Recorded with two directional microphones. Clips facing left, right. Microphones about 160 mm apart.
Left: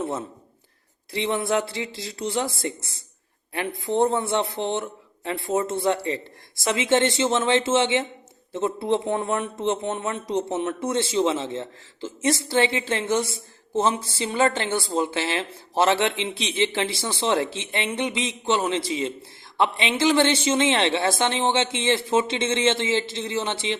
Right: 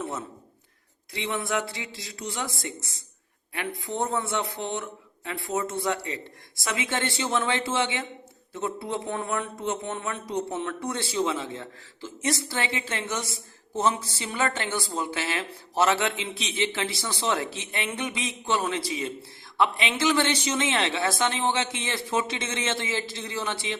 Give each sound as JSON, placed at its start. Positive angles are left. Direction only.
{"t": 1.1, "sound": "speech", "side_deg": 30}